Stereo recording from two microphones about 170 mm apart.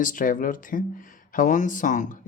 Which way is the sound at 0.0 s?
50° left (ahead or behind).